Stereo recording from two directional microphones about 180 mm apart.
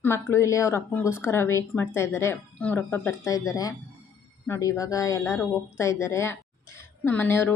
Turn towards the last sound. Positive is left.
turn(degrees=10)  # may be behind; listen again after turning